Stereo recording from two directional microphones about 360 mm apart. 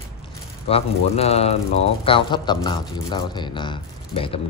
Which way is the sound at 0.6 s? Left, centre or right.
Centre.